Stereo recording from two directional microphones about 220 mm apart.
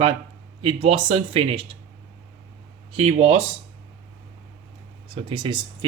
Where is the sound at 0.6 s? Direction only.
25° right (ahead or behind).